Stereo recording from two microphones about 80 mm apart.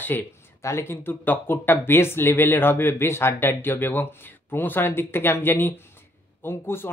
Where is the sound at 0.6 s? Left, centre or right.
Left.